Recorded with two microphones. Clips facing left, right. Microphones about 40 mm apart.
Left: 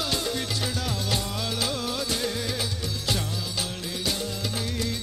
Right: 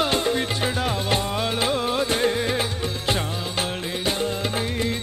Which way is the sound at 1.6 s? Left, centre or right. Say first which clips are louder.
Right 7 dB; right.